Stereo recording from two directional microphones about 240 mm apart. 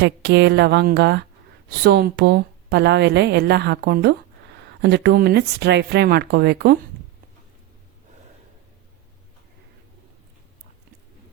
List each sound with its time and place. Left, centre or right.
0.0 s speech: right